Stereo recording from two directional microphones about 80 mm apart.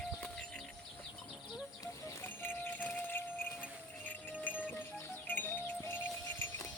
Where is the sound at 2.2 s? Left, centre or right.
Left.